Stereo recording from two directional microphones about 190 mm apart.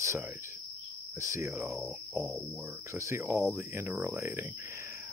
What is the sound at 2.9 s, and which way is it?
Speech, 15° right (ahead or behind).